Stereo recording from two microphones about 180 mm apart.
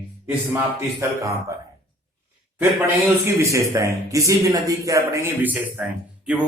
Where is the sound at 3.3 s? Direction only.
15° right (ahead or behind).